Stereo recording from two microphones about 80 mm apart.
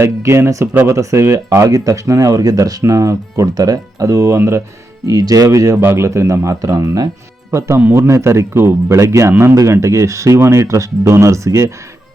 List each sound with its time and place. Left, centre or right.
0.0 s speech: right
5.0 s speech: right
7.5 s speech: right